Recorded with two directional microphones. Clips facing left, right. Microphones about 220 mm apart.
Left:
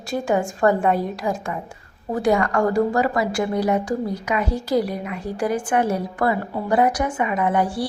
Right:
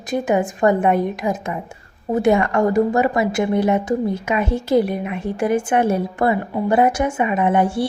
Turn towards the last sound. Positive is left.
turn(degrees=-25)  # may be behind; listen again after turning